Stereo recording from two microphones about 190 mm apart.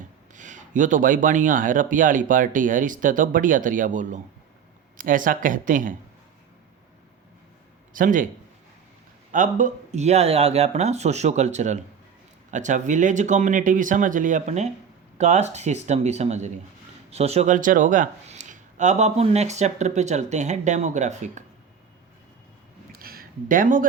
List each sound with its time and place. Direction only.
0.3 s speech: 40° right (ahead or behind)
7.9 s speech: 45° right (ahead or behind)
9.3 s speech: 40° right (ahead or behind)
22.9 s a sound: 50° right (ahead or behind)